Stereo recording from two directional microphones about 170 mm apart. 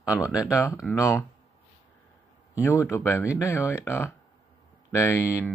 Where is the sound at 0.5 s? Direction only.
15° left (ahead or behind).